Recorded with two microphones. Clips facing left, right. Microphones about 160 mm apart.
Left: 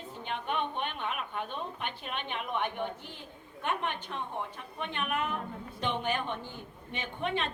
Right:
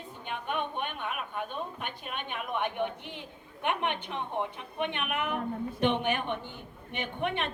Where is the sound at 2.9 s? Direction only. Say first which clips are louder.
Right 1 dB; 65° right (ahead or behind).